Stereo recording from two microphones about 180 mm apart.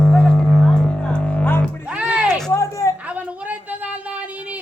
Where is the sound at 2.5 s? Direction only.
15° left (ahead or behind).